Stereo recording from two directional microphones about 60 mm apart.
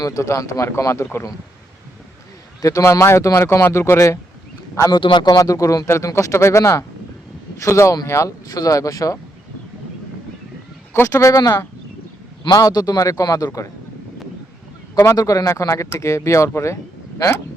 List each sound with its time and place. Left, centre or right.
0.0 s a man's voice: left
0.6 s speech: left
2.6 s speech: left
2.8 s speech: left
4.8 s a man's voice: left
6.1 s speech: left
8.4 s speech: left
11.1 s a man's voice: left
12.5 s a man's voice: left
14.9 s a man's voice: left
15.2 s speech: left